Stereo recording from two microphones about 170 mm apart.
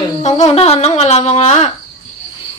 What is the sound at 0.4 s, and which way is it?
Speech, 40° left (ahead or behind).